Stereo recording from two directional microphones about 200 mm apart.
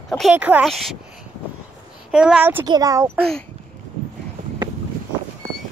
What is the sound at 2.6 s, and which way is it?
Speech, 20° right (ahead or behind).